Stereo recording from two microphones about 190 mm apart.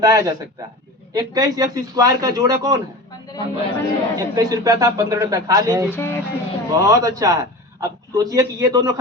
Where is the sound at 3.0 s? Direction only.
20° left (ahead or behind).